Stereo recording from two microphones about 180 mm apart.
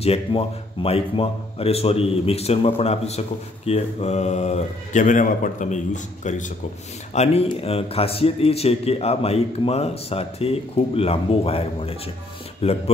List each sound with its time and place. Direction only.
0.0 s a man's voice: 30° left (ahead or behind)